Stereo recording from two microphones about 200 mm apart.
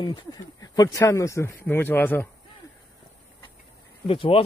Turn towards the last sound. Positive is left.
turn(degrees=25)  # may be behind; listen again after turning